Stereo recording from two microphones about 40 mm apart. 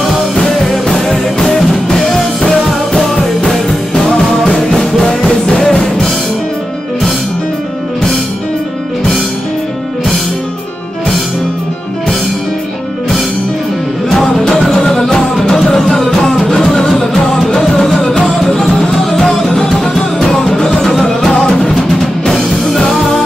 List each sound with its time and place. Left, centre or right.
0.0 s music: centre
14.0 s music: centre
22.3 s music: centre